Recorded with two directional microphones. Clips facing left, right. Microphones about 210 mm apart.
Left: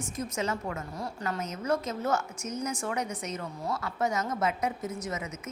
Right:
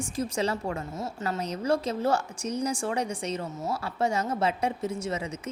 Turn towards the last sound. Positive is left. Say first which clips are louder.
# right 4 dB
turn(degrees=-30)  # may be behind; listen again after turning